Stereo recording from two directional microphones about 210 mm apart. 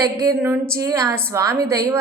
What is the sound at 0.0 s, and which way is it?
A woman's voice, 15° right (ahead or behind).